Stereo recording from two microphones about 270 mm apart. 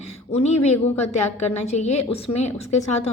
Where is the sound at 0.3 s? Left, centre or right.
Left.